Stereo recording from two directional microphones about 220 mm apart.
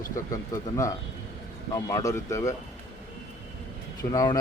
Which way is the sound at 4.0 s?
15° left (ahead or behind).